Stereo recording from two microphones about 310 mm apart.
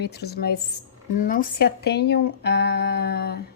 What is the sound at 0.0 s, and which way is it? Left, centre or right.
Speech, left.